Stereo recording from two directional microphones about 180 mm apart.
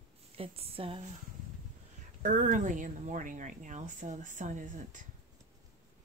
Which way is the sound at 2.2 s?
45° right (ahead or behind).